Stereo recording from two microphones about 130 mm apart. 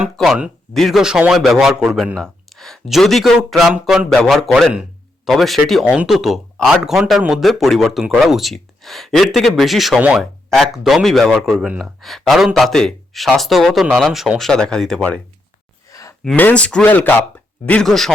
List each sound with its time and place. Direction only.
0.0 s speech: 5° right (ahead or behind)
15.9 s a sound: 25° left (ahead or behind)
16.2 s speech: 10° left (ahead or behind)